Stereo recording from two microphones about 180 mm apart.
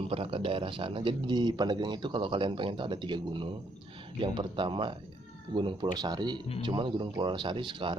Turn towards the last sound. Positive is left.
turn(degrees=-25)  # may be behind; listen again after turning